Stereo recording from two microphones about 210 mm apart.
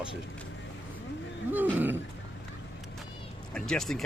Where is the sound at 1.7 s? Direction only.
10° right (ahead or behind).